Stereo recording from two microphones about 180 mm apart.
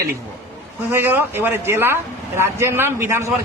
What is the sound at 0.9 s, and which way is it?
Speech, 10° right (ahead or behind).